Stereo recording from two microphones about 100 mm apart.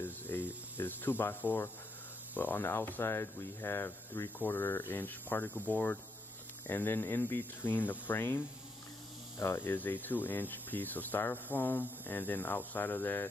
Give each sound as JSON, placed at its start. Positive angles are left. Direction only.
{"t": 0.0, "sound": "a sound", "side_deg": 20}
{"t": 0.7, "sound": "speech", "side_deg": 20}
{"t": 9.4, "sound": "speech", "side_deg": 20}